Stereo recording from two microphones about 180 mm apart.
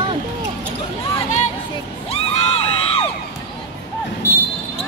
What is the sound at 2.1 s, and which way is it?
Crowd, 40° left (ahead or behind).